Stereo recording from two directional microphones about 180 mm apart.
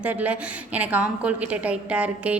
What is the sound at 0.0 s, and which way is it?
A woman's voice, 10° right (ahead or behind).